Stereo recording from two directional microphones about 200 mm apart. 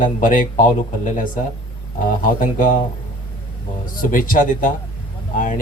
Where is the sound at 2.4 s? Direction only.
40° left (ahead or behind).